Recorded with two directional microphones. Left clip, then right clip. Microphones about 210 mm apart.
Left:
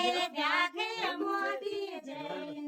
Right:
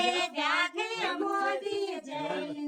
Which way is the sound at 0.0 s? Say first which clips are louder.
Right 2 dB; centre (ahead or behind).